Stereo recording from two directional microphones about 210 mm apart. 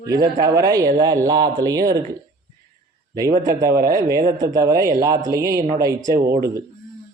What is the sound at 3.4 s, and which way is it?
Speech, 15° right (ahead or behind).